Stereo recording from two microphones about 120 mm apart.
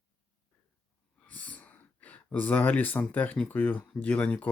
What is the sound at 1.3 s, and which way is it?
Speech, 10° left (ahead or behind).